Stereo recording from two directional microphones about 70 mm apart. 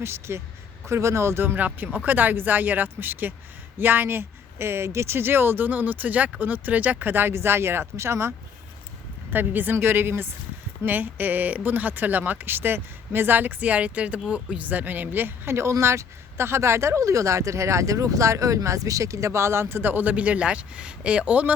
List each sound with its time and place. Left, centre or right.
0.0 s speech: right
1.5 s speech: right
9.3 s speech: right